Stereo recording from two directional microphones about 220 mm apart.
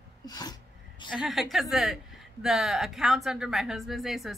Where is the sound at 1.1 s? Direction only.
Centre (ahead or behind).